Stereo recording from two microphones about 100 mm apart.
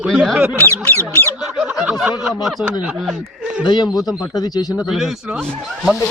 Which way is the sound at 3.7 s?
45° left (ahead or behind).